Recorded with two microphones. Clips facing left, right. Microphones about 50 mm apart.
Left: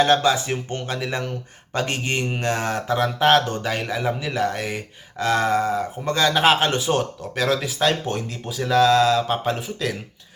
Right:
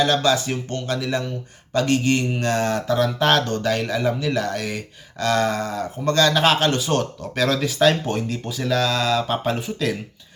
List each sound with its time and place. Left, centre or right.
0.2 s speech: centre
7.2 s speech: centre